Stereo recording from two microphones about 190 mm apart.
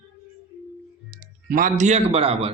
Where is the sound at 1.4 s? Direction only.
45° right (ahead or behind).